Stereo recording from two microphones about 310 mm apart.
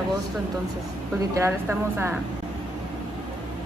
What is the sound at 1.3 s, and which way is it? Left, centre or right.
Speech, centre.